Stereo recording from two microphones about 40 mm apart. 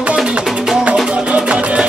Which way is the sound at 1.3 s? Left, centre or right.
Right.